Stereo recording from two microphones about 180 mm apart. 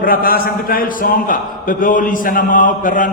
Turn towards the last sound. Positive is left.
turn(degrees=45)  # may be behind; listen again after turning